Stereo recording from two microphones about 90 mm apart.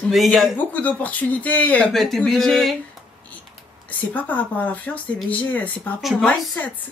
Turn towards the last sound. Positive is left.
turn(degrees=15)  # may be behind; listen again after turning